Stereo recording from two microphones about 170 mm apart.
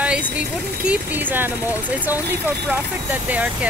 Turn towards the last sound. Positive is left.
turn(degrees=-10)  # may be behind; listen again after turning